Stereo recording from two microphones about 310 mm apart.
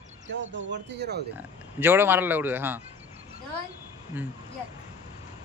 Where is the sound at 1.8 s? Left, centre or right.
Centre.